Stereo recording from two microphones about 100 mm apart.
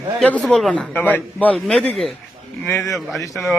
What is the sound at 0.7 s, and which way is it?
Speech, 15° left (ahead or behind).